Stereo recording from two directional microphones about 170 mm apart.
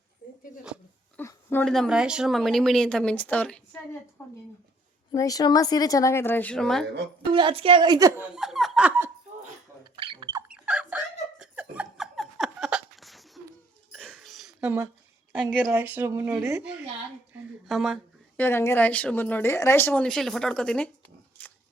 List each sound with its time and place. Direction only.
1.1 s a sound: 15° left (ahead or behind)
1.6 s speech: centre (ahead or behind)
5.1 s a woman's voice: 20° left (ahead or behind); by 6.8 s 5° left (ahead or behind)
7.3 s a woman's voice: 30° right (ahead or behind)
8.2 s speech: centre (ahead or behind)
9.8 s a sound: 30° right (ahead or behind)
10.5 s laughter: 5° right (ahead or behind)
13.9 s a sound: centre (ahead or behind)
15.3 s a woman's voice: 10° right (ahead or behind)
17.3 s speech: centre (ahead or behind)
18.3 s speech: 15° left (ahead or behind)
21.4 s pig: 10° left (ahead or behind)